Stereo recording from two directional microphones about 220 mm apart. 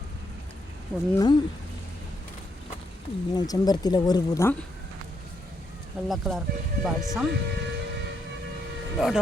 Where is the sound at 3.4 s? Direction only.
20° left (ahead or behind).